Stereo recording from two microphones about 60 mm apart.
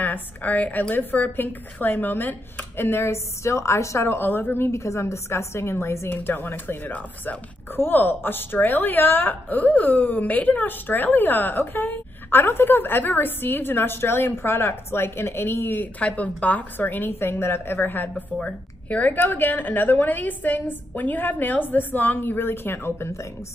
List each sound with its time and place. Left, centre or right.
0.0 s speech: left
4.6 s a woman's voice: left
6.1 s speech: left
16.0 s speech: left